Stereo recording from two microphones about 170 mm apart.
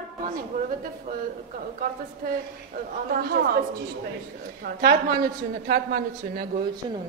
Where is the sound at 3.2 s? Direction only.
65° right (ahead or behind).